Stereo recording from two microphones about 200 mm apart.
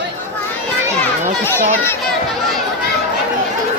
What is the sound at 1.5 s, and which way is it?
Speech, 10° left (ahead or behind).